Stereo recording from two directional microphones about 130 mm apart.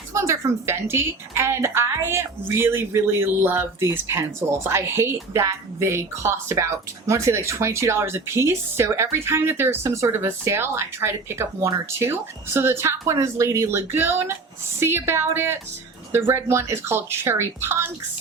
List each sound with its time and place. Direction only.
0.1 s speech: 20° right (ahead or behind)